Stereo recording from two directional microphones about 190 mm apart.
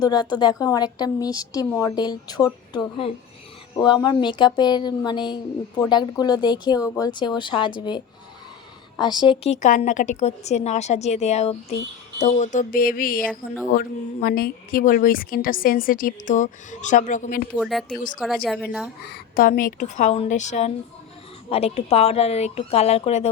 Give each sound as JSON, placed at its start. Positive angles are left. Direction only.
{"t": 0.0, "sound": "a woman's voice", "side_deg": 20}
{"t": 17.6, "sound": "a woman's voice", "side_deg": 0}
{"t": 19.0, "sound": "a woman's voice", "side_deg": 55}